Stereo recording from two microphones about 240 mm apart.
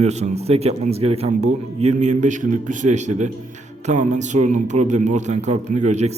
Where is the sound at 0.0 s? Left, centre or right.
Right.